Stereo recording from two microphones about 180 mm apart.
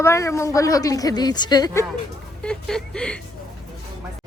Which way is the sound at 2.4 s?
5° left (ahead or behind).